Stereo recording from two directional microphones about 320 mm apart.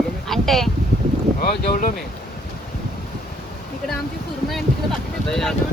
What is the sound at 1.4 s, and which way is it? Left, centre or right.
Speech, left.